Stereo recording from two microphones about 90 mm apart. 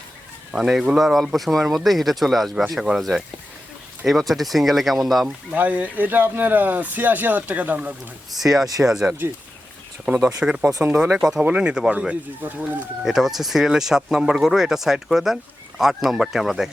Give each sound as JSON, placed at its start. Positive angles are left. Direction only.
{"t": 0.5, "sound": "speech", "side_deg": -5}
{"t": 5.5, "sound": "speech", "side_deg": -20}
{"t": 8.3, "sound": "speech", "side_deg": -5}
{"t": 9.0, "sound": "speech", "side_deg": -20}
{"t": 10.1, "sound": "speech", "side_deg": -10}
{"t": 13.0, "sound": "speech", "side_deg": -5}